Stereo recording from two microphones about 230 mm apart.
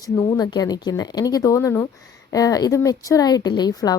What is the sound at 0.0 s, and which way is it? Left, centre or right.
A woman's voice, centre.